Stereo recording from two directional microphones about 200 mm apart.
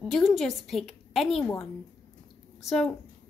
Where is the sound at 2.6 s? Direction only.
Centre (ahead or behind).